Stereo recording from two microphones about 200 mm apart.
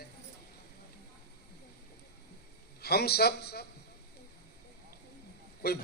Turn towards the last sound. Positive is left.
turn(degrees=50)  # may be behind; listen again after turning